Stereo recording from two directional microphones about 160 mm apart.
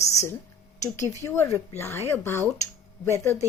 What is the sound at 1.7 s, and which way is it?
Speech, 15° left (ahead or behind).